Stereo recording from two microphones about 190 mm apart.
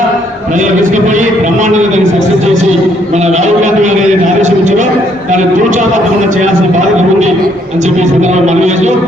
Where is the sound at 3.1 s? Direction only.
35° right (ahead or behind).